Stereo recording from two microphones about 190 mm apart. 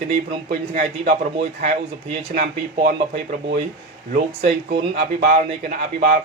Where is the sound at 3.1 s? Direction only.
35° right (ahead or behind).